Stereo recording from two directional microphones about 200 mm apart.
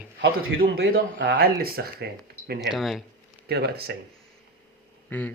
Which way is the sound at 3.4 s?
55° right (ahead or behind).